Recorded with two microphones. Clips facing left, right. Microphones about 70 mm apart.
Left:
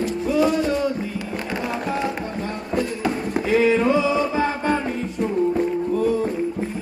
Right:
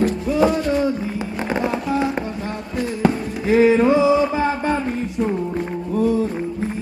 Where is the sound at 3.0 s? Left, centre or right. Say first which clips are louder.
Right 3 dB; right.